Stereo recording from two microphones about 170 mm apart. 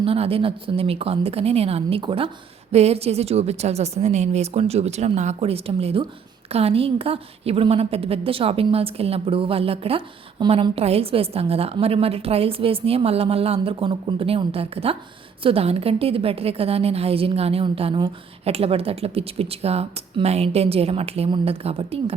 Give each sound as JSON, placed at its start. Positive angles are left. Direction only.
{"t": 0.0, "sound": "a woman's voice", "side_deg": -35}